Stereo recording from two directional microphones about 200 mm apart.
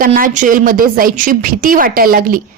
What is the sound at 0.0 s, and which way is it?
A woman's voice, 45° right (ahead or behind).